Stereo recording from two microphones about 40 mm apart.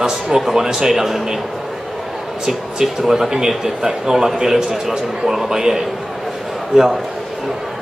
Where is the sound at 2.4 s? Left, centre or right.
Centre.